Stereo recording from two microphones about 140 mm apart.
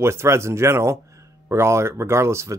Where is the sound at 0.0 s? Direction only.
20° right (ahead or behind).